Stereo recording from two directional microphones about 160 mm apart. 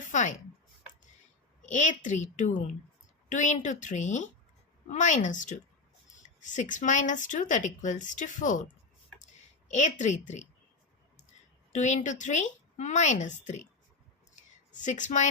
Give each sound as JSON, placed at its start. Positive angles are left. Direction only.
{"t": 0.1, "sound": "speech", "side_deg": 50}
{"t": 1.6, "sound": "speech", "side_deg": 50}
{"t": 9.1, "sound": "a sound", "side_deg": 50}
{"t": 11.7, "sound": "speech", "side_deg": 50}
{"t": 14.7, "sound": "a woman's voice", "side_deg": 50}